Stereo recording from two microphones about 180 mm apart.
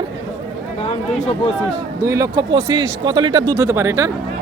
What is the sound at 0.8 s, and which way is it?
Speech, 35° left (ahead or behind).